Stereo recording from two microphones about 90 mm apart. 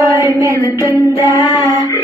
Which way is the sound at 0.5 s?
40° left (ahead or behind).